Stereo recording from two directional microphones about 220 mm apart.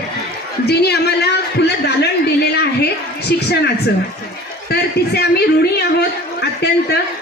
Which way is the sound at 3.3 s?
45° left (ahead or behind).